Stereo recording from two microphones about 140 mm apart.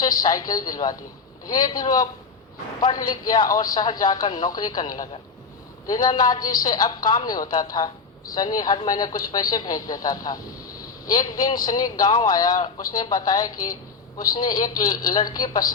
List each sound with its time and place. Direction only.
0.0 s a man's voice: 30° left (ahead or behind)